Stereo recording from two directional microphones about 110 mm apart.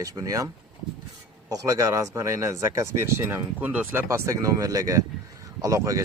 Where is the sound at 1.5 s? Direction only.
30° right (ahead or behind).